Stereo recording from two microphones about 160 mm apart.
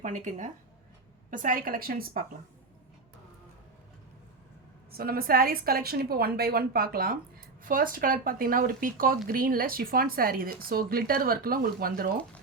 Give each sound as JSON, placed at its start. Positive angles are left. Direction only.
{"t": 0.0, "sound": "speech", "side_deg": -50}
{"t": 4.9, "sound": "a woman's voice", "side_deg": -70}